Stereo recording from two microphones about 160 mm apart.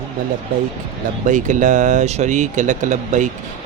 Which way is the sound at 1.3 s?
50° right (ahead or behind).